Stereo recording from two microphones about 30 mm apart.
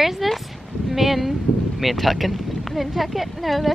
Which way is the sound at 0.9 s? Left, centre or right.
Centre.